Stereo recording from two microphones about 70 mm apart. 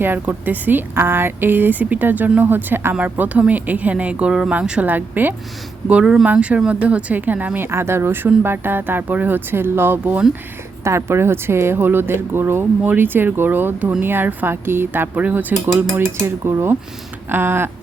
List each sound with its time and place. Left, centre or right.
0.0 s speech: right
5.9 s speech: centre
16.0 s speech: right